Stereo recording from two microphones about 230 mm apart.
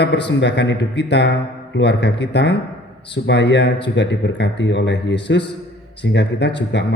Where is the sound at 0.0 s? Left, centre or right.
Left.